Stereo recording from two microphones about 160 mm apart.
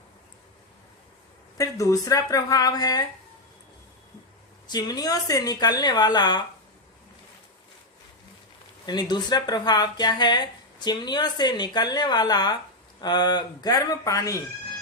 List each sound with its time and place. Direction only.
1.5 s speech: 20° left (ahead or behind)
4.7 s speech: 25° left (ahead or behind)
8.9 s speech: 25° left (ahead or behind)